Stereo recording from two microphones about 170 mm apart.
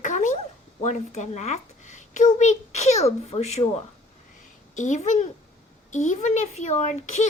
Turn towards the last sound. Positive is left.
turn(degrees=40)  # may be behind; listen again after turning